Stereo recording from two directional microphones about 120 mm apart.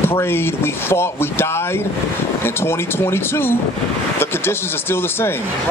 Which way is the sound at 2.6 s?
20° left (ahead or behind).